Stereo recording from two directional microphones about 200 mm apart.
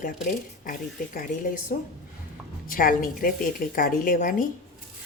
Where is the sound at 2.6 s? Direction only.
45° left (ahead or behind).